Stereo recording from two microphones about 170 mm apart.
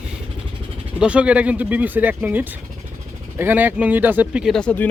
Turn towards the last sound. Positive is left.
turn(degrees=5)  # may be behind; listen again after turning